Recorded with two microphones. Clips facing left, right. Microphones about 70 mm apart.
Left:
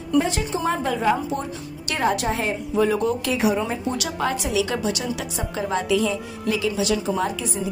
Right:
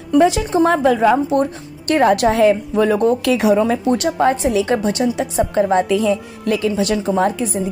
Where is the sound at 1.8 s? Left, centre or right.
Right.